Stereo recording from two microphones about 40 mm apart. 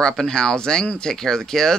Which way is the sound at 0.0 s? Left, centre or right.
Centre.